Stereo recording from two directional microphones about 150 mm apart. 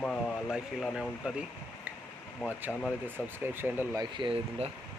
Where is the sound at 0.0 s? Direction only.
Centre (ahead or behind); by 4.0 s 15° right (ahead or behind).